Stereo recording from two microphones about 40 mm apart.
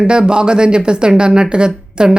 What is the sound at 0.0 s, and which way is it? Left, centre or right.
Speech, right.